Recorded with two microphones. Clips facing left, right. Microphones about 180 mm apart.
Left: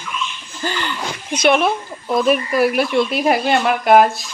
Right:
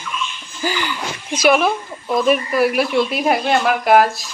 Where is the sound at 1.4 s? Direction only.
5° right (ahead or behind).